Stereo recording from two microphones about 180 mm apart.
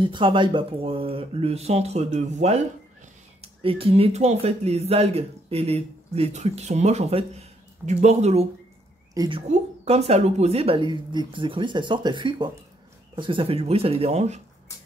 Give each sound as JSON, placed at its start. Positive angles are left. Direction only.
{"t": 0.0, "sound": "speech", "side_deg": -25}
{"t": 9.1, "sound": "a woman's voice", "side_deg": -20}
{"t": 9.5, "sound": "speech", "side_deg": -35}